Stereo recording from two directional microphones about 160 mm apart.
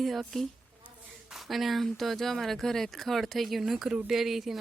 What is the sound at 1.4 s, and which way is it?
Speech, centre (ahead or behind).